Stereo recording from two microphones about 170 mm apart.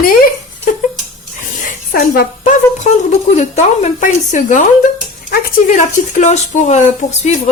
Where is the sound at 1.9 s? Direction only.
55° left (ahead or behind).